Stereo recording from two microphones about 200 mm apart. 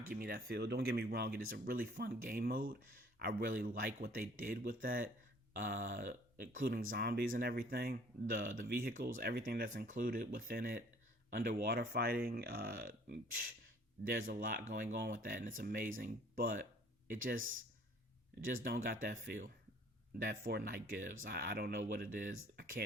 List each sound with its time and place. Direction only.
0.0 s speech: 45° right (ahead or behind)